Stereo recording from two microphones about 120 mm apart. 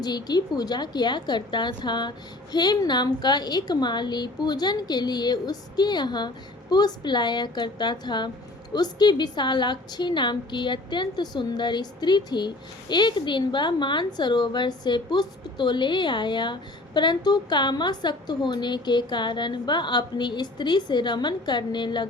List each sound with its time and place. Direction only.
0.0 s a woman's voice: 35° left (ahead or behind)